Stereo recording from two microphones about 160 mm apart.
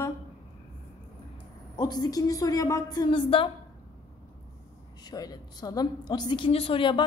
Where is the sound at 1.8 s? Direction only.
25° left (ahead or behind).